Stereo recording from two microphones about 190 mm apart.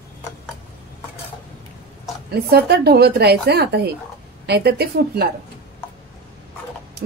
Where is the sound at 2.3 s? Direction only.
55° right (ahead or behind).